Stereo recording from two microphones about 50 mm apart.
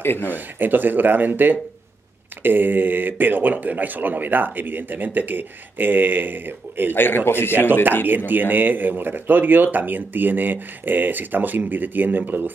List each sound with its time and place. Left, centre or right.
0.0 s speech: left
0.3 s speech: right
6.9 s speech: left
8.3 s speech: right